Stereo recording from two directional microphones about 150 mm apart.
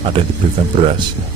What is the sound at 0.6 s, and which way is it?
Speech, 35° right (ahead or behind).